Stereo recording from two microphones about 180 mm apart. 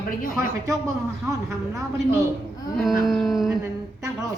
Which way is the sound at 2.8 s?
Centre (ahead or behind).